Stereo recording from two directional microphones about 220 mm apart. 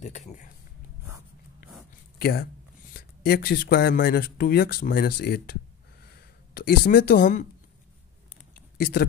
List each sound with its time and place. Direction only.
0.0 s speech: 30° left (ahead or behind)
2.1 s a sound: 45° left (ahead or behind)
2.9 s speech: 40° left (ahead or behind)
8.7 s speech: 45° left (ahead or behind)